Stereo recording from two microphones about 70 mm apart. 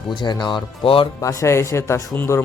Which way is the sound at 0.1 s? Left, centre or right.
Left.